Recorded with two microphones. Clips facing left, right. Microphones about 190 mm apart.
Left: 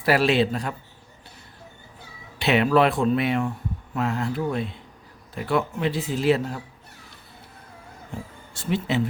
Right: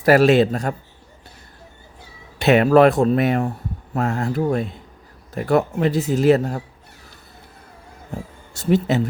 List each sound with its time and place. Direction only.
0.0 s speech: 45° right (ahead or behind)
2.4 s speech: 45° right (ahead or behind)
8.1 s speech: 40° right (ahead or behind)